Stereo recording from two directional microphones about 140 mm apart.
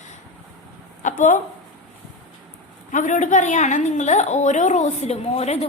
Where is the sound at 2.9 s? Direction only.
65° left (ahead or behind).